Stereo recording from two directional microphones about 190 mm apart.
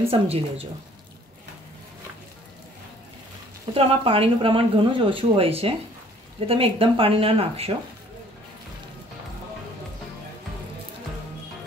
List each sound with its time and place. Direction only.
0.1 s speech: 30° right (ahead or behind)
3.7 s speech: 30° right (ahead or behind)